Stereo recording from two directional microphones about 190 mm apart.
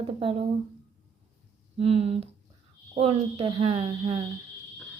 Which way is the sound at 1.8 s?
35° right (ahead or behind).